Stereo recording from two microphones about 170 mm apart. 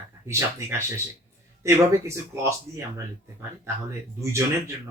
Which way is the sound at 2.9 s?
15° right (ahead or behind).